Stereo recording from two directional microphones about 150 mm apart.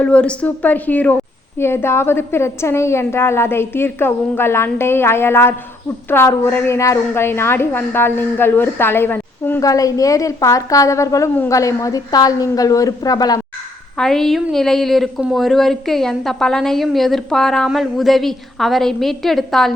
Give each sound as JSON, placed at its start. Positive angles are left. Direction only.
{"t": 0.0, "sound": "a woman's voice", "side_deg": 10}
{"t": 14.0, "sound": "a woman's voice", "side_deg": 5}